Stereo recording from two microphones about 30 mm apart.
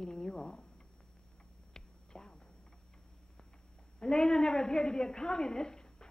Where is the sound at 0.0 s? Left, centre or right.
Left.